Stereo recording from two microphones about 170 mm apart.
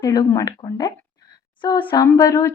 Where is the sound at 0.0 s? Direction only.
20° left (ahead or behind).